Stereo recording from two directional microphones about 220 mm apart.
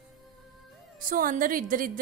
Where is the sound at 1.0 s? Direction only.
40° right (ahead or behind).